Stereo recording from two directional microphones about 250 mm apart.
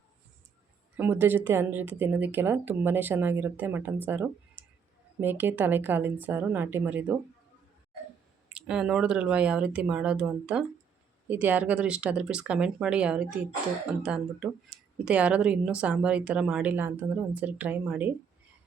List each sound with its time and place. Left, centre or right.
0.9 s a woman's voice: centre
8.5 s speech: centre